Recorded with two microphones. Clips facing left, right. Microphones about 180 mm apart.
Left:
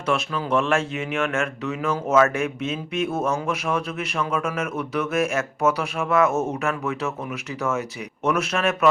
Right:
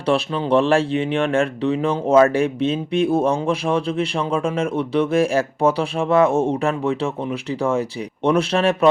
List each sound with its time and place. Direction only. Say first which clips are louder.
0.1 s speech: right 5 dB; 30° right (ahead or behind)